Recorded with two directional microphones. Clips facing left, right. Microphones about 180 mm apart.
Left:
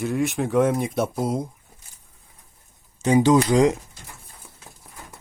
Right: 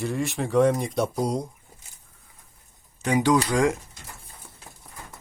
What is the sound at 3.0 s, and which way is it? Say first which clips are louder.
Speech: left 4 dB; 25° left (ahead or behind).